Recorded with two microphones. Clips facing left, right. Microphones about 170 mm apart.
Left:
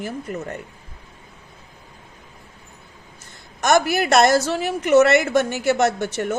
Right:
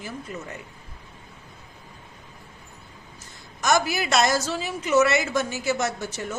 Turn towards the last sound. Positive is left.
turn(degrees=65)  # may be behind; listen again after turning